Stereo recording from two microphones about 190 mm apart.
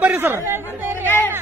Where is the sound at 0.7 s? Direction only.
10° right (ahead or behind).